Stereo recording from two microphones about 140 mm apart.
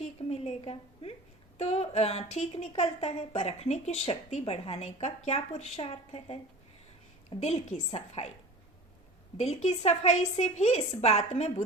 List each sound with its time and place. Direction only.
0.0 s a sound: 50° left (ahead or behind)
1.5 s a woman's voice: 50° left (ahead or behind)
9.4 s a woman's voice: 50° left (ahead or behind)